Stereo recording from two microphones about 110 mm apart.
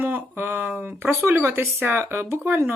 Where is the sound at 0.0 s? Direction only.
20° right (ahead or behind).